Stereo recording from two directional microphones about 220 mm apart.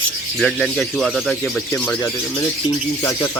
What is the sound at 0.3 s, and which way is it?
A man's voice, centre (ahead or behind).